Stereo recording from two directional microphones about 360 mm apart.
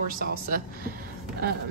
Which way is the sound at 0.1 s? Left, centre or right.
Right.